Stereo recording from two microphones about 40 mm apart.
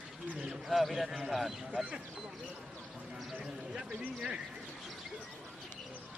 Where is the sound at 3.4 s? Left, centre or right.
Centre.